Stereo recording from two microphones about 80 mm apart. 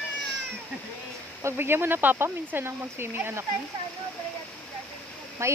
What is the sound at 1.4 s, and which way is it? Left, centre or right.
Speech, right.